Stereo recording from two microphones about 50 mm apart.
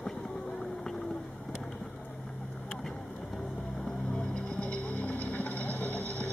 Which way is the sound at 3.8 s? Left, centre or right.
Centre.